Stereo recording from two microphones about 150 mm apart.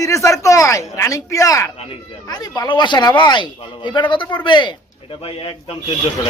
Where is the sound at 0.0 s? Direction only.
20° left (ahead or behind); by 5.7 s 40° left (ahead or behind).